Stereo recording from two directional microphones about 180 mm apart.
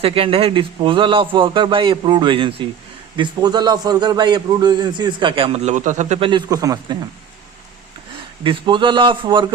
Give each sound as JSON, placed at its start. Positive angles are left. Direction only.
{"t": 0.0, "sound": "a man's voice", "side_deg": -30}
{"t": 8.4, "sound": "a man's voice", "side_deg": -25}